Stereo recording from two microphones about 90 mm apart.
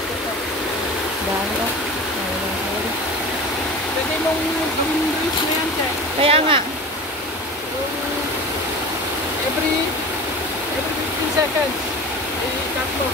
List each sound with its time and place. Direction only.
6.2 s speech: 90° right